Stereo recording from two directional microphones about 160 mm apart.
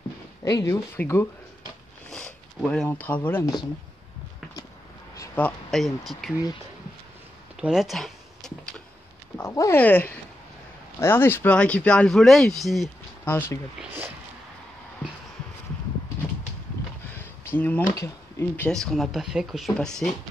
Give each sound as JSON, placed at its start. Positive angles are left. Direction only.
{"t": 0.4, "sound": "speech", "side_deg": 20}
{"t": 2.0, "sound": "a sound", "side_deg": 5}
{"t": 5.1, "sound": "a sound", "side_deg": 15}
{"t": 5.7, "sound": "speech", "side_deg": 0}
{"t": 7.6, "sound": "speech", "side_deg": 0}
{"t": 9.4, "sound": "speech", "side_deg": 15}
{"t": 13.2, "sound": "speech", "side_deg": 15}
{"t": 13.7, "sound": "speech", "side_deg": -10}
{"t": 17.6, "sound": "speech", "side_deg": 10}